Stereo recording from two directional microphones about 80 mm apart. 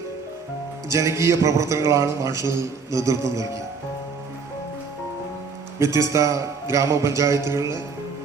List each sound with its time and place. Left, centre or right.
0.9 s a man's voice: right
5.8 s a man's voice: right